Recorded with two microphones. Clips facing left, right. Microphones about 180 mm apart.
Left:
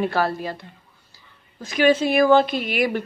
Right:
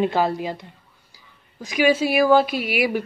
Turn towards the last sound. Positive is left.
turn(degrees=-10)  # may be behind; listen again after turning